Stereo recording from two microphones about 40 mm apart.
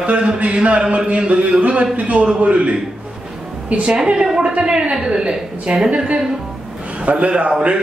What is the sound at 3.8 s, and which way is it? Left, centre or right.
A woman's voice, right.